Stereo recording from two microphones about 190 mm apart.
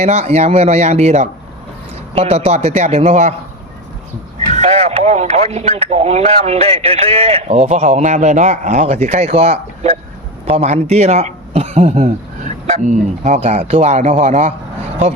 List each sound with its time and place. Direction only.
0.0 s speech: 35° right (ahead or behind)
4.5 s speech: 35° right (ahead or behind)